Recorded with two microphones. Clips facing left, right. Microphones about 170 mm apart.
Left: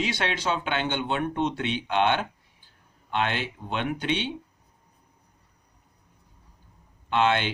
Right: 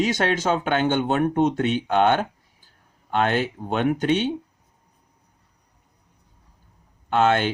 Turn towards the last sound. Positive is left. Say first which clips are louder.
# right 4 dB
turn(degrees=-45)  # may be behind; listen again after turning